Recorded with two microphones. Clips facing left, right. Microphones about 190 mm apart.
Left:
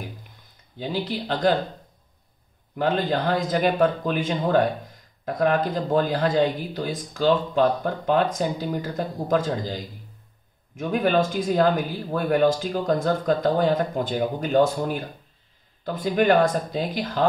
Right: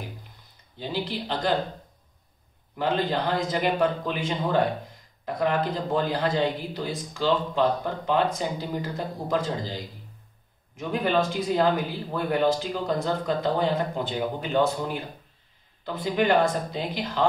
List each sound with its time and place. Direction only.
0.7 s speech: 50° left (ahead or behind)
2.8 s speech: 50° left (ahead or behind)
10.8 s speech: 50° left (ahead or behind)